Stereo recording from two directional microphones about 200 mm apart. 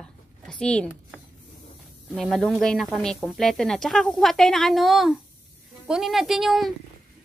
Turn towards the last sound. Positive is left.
turn(degrees=0)  # may be behind; listen again after turning